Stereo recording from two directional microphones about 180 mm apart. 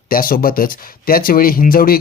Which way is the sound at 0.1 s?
55° left (ahead or behind).